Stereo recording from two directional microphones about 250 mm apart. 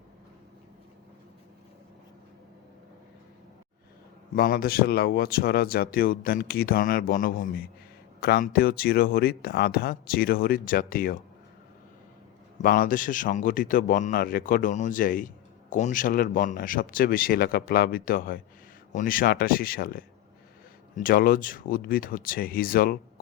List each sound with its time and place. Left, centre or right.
4.4 s speech: left
12.5 s speech: left